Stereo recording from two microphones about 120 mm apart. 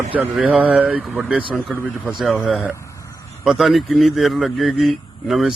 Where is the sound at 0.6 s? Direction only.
10° right (ahead or behind).